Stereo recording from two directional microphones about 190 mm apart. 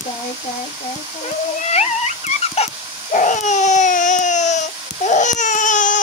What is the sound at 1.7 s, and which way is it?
Dog, 35° left (ahead or behind).